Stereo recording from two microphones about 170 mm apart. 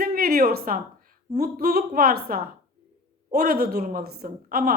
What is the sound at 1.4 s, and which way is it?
A woman's voice, 60° right (ahead or behind).